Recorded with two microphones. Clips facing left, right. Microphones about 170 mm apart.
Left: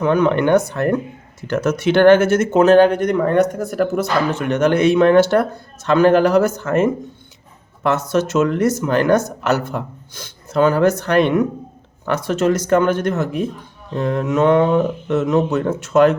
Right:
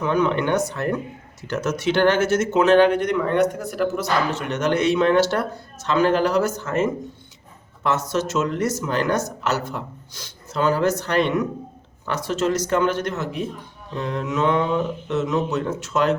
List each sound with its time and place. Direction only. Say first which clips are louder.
0.0 s speech: left 5 dB; 55° left (ahead or behind)